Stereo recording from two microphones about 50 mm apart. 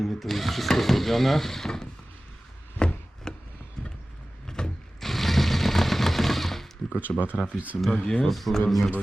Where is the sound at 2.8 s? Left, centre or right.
Centre.